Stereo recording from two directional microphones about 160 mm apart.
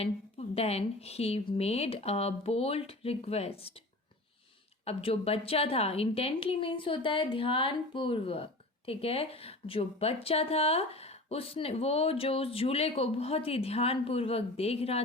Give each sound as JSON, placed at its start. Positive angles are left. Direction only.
{"t": 0.0, "sound": "a woman's voice", "side_deg": 40}
{"t": 4.9, "sound": "a woman's voice", "side_deg": 40}